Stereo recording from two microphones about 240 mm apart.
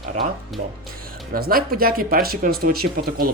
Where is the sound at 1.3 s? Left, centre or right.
Right.